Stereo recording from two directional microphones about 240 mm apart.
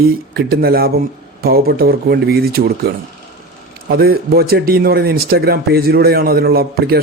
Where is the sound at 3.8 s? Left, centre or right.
Right.